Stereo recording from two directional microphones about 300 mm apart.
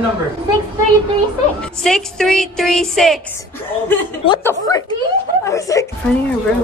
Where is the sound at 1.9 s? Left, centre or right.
Centre.